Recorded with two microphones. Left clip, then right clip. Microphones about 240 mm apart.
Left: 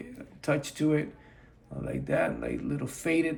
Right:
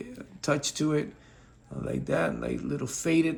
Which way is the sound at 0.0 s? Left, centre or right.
Centre.